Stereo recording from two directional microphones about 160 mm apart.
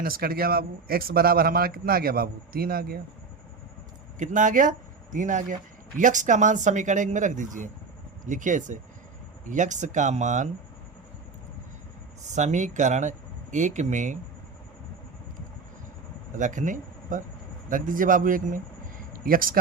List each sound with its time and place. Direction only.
0.0 s a man's voice: 70° right (ahead or behind)
4.2 s speech: 50° right (ahead or behind)
12.2 s speech: 50° right (ahead or behind)
16.3 s a man's voice: 50° right (ahead or behind)